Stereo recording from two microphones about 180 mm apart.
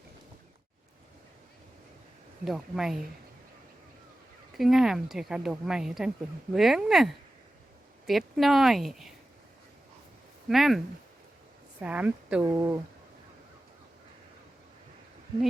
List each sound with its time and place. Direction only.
2.4 s speech: centre (ahead or behind)
4.5 s speech: centre (ahead or behind)
10.5 s speech: centre (ahead or behind)